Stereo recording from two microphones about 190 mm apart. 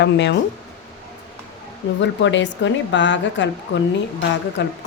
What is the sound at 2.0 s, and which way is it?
Speech, 70° left (ahead or behind).